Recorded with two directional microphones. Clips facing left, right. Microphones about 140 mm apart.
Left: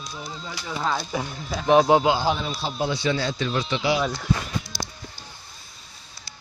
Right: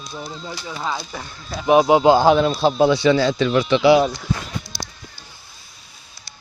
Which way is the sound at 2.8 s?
90° right.